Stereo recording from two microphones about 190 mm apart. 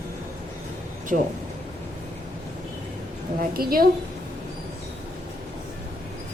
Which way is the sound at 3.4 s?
50° right (ahead or behind).